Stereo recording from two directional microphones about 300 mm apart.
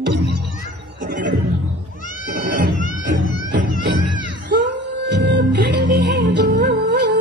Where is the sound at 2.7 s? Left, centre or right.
Left.